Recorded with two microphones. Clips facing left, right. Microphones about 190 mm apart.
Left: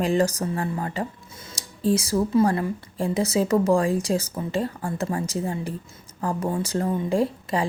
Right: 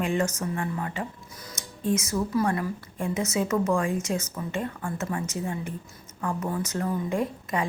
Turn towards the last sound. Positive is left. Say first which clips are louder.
# left 5 dB
turn(degrees=30)  # may be behind; listen again after turning